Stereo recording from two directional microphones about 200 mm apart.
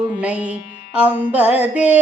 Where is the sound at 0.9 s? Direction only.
5° right (ahead or behind).